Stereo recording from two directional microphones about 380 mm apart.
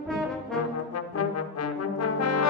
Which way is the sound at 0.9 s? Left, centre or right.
Left.